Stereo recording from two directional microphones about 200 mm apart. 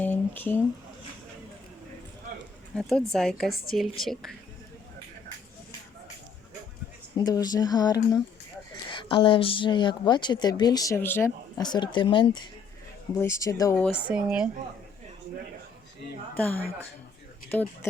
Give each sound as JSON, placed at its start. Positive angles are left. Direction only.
{"t": 0.0, "sound": "a sound", "side_deg": 10}
{"t": 2.7, "sound": "speech", "side_deg": 5}
{"t": 7.2, "sound": "speech", "side_deg": 20}
{"t": 14.1, "sound": "speech", "side_deg": -5}
{"t": 16.4, "sound": "speech", "side_deg": 10}